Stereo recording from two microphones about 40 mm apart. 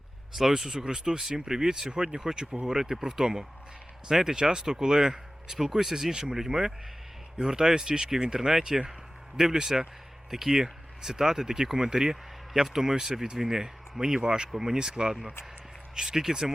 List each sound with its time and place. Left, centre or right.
0.3 s speech: centre
2.6 s speech: centre